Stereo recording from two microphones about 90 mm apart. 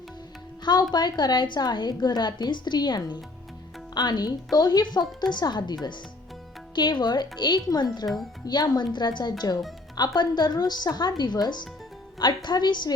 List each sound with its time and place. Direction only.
0.6 s a woman's voice: 50° left (ahead or behind)
6.7 s a woman's voice: 55° left (ahead or behind)
8.0 s speech: centre (ahead or behind)
8.4 s a woman's voice: 50° left (ahead or behind)